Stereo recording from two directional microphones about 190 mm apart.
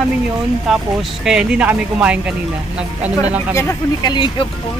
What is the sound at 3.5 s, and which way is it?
Speech, 15° left (ahead or behind).